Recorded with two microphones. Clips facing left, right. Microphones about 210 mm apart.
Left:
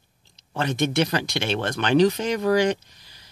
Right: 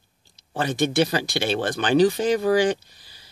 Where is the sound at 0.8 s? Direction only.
35° right (ahead or behind).